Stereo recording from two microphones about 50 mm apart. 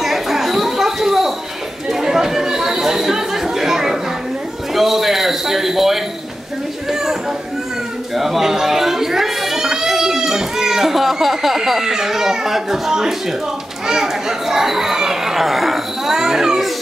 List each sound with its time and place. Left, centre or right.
0.0 s chatter: centre
4.7 s music: centre
6.9 s a sound: centre
13.8 s a child's voice: centre